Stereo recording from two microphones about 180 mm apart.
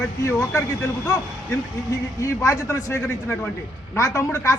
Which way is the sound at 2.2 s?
15° left (ahead or behind).